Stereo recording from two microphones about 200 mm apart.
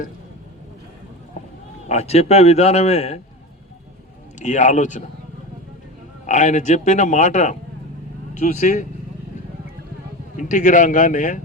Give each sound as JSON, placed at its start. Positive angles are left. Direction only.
{"t": 1.9, "sound": "a man's voice", "side_deg": 30}
{"t": 4.4, "sound": "a man's voice", "side_deg": 35}
{"t": 6.2, "sound": "a man's voice", "side_deg": 40}
{"t": 10.3, "sound": "a man's voice", "side_deg": 40}